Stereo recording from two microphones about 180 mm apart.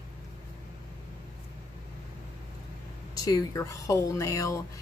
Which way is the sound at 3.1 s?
20° left (ahead or behind).